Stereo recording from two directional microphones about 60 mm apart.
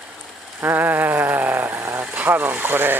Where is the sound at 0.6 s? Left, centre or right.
Right.